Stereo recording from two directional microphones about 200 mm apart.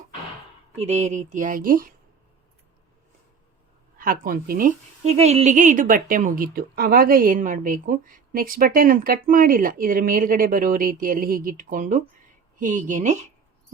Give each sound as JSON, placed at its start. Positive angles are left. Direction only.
{"t": 0.8, "sound": "speech", "side_deg": -35}
{"t": 3.9, "sound": "speech", "side_deg": -45}
{"t": 5.0, "sound": "a woman's voice", "side_deg": -30}